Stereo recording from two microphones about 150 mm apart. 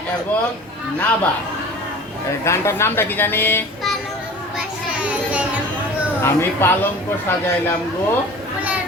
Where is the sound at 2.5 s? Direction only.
15° left (ahead or behind).